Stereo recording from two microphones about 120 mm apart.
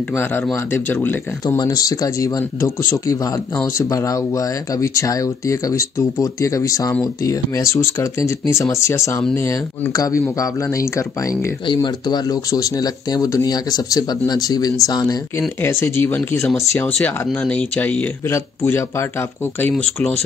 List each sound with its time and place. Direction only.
0.1 s speech: 20° left (ahead or behind)
11.6 s speech: 40° left (ahead or behind)
15.6 s speech: 20° left (ahead or behind)
19.8 s speech: 10° left (ahead or behind)